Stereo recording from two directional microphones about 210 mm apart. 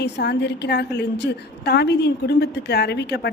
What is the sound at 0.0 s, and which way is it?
A woman's voice, 50° left (ahead or behind).